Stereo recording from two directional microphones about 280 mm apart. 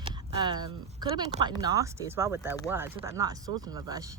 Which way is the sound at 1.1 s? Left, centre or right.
Centre.